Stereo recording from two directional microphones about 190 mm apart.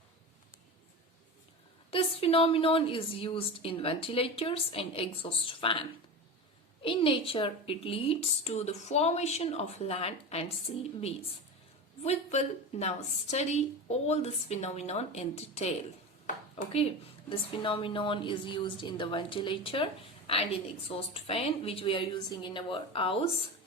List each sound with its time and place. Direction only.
1.9 s a woman's voice: 30° left (ahead or behind)
6.8 s a woman's voice: 30° left (ahead or behind)
16.2 s a sound: 40° left (ahead or behind)
17.2 s a woman's voice: 30° left (ahead or behind)